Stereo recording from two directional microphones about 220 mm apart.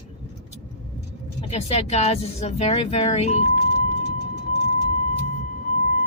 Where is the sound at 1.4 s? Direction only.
30° left (ahead or behind).